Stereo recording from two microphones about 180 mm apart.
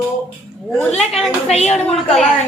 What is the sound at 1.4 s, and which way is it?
Speech, 35° left (ahead or behind).